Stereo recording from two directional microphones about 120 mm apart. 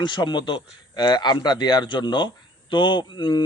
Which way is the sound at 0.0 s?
40° left (ahead or behind).